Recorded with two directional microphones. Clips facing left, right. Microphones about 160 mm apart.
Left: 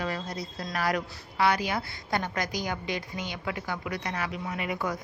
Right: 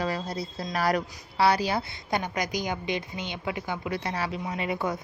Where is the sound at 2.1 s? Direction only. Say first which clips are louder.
Right 1 dB; 20° right (ahead or behind).